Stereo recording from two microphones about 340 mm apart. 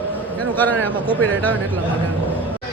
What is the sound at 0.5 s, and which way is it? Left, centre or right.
Speech, centre.